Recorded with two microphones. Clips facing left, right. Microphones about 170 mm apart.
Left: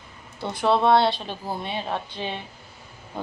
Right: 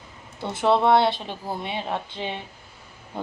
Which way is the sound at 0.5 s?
20° right (ahead or behind).